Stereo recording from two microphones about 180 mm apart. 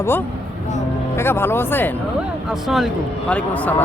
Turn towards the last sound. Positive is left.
turn(degrees=10)  # may be behind; listen again after turning